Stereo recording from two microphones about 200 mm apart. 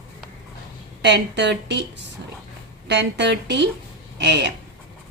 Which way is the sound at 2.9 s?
60° right (ahead or behind).